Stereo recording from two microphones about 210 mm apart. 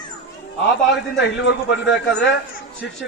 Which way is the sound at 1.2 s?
60° left (ahead or behind).